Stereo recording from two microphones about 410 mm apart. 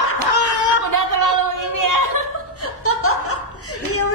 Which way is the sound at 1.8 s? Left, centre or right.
Right.